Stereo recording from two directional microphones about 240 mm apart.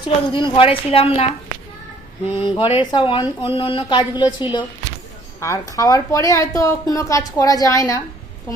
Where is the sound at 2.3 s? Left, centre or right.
Left.